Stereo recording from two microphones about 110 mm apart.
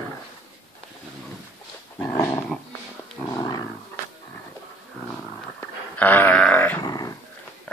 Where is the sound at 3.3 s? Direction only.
40° left (ahead or behind).